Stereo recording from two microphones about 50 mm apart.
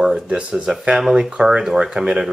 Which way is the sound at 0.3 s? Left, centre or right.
Right.